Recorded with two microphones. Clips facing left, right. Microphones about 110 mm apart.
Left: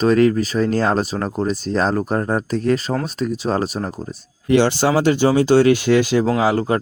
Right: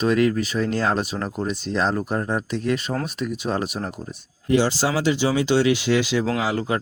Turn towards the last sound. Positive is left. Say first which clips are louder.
# left 6 dB
turn(degrees=40)  # may be behind; listen again after turning